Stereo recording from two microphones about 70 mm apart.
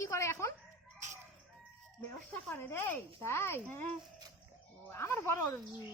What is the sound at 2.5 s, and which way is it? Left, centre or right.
A man's voice, left.